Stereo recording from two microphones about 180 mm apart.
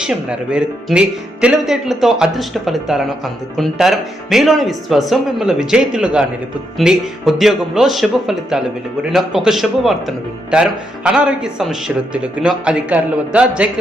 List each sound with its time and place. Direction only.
0.0 s speech: 5° right (ahead or behind)